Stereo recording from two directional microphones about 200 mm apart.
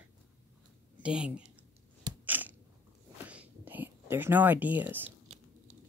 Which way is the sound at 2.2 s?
10° right (ahead or behind).